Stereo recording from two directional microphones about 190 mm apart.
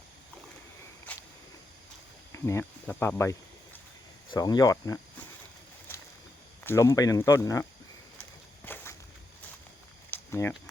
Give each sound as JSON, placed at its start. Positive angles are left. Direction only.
{"t": 2.3, "sound": "speech", "side_deg": 15}
{"t": 6.7, "sound": "speech", "side_deg": 15}
{"t": 8.6, "sound": "walk", "side_deg": 10}
{"t": 10.1, "sound": "a sound", "side_deg": 15}